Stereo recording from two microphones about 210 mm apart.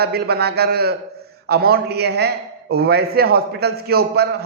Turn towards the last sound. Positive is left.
turn(degrees=-50)  # may be behind; listen again after turning